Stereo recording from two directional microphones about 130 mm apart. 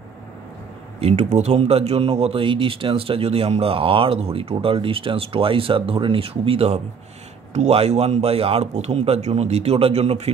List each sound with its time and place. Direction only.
0.9 s speech: 55° right (ahead or behind)